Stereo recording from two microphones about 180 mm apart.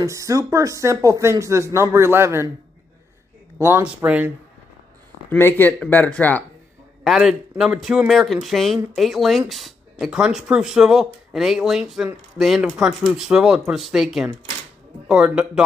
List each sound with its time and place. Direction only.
0.0 s speech: 15° right (ahead or behind)
3.5 s speech: 15° right (ahead or behind)
5.3 s speech: 10° left (ahead or behind)